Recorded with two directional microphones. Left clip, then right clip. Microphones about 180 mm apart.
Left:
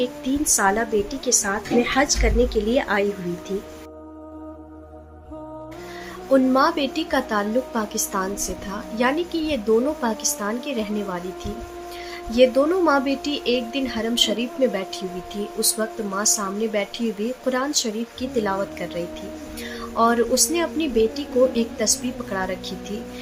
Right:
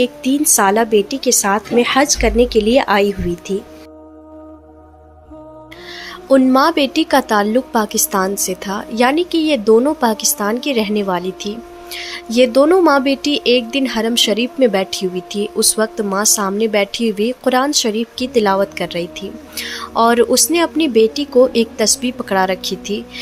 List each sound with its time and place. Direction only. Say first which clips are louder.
0.0 s speech: right 8 dB; 50° right (ahead or behind)
6.3 s speech: right 6 dB; 50° right (ahead or behind)